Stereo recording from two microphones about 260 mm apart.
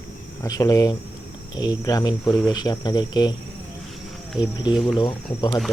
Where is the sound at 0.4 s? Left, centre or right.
Centre.